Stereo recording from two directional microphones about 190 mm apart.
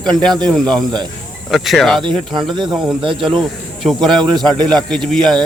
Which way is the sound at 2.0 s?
25° right (ahead or behind).